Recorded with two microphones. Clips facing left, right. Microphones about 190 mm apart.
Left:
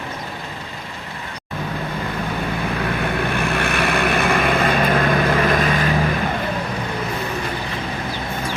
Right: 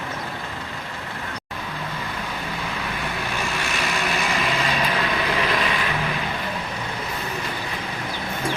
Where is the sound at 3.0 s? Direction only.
60° left (ahead or behind).